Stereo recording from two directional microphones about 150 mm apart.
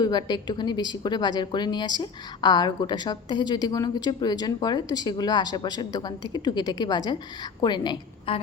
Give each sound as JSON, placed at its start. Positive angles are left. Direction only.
{"t": 0.0, "sound": "a woman's voice", "side_deg": 30}